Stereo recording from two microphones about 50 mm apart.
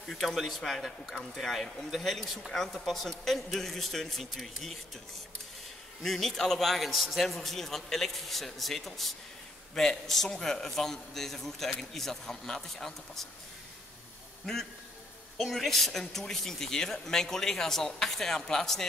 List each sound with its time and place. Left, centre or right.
0.1 s a man's voice: centre
6.0 s a man's voice: centre
14.4 s a man's voice: centre